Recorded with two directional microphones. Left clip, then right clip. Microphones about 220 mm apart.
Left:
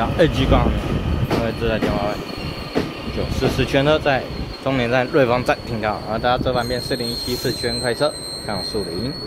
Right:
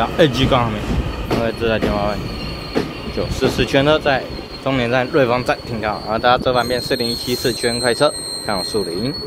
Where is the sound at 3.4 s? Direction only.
10° right (ahead or behind).